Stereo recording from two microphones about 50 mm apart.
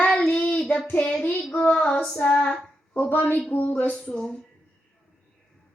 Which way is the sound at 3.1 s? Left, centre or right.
Left.